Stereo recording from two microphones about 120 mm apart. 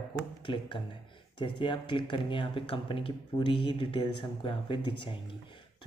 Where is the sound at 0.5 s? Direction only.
45° left (ahead or behind).